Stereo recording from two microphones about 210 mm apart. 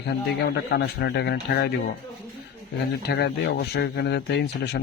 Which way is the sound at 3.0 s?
50° left (ahead or behind).